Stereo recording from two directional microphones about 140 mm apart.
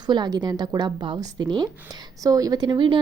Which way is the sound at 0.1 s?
30° right (ahead or behind).